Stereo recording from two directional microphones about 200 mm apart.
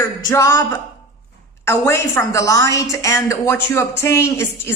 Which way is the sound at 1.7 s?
15° left (ahead or behind).